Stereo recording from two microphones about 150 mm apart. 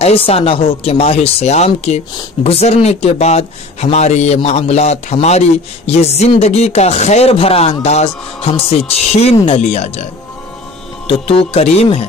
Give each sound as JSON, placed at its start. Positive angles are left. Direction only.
{"t": 0.0, "sound": "speech", "side_deg": 40}
{"t": 11.1, "sound": "speech", "side_deg": 40}